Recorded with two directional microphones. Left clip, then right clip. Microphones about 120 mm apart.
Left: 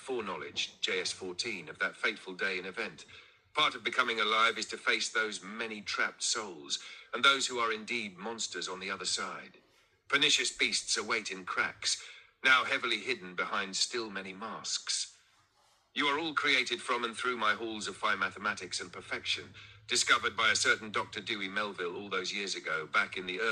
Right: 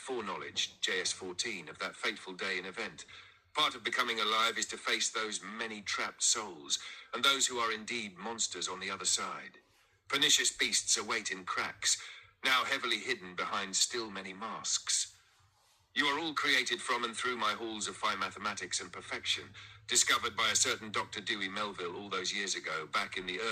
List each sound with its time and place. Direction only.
0.0 s a man's voice: 5° left (ahead or behind)